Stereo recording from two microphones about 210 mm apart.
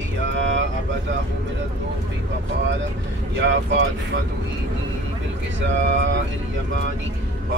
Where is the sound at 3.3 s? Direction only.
65° right (ahead or behind).